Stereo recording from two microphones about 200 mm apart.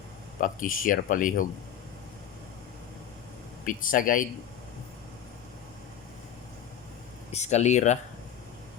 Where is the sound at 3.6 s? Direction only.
45° left (ahead or behind).